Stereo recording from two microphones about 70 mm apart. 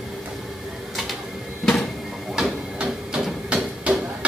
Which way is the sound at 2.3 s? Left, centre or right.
Centre.